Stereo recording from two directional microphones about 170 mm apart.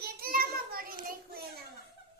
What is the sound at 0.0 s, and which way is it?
Child singing, 60° right (ahead or behind).